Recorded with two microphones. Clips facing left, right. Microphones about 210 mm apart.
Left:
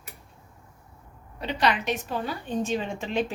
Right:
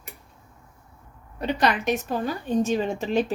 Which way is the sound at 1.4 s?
45° right (ahead or behind).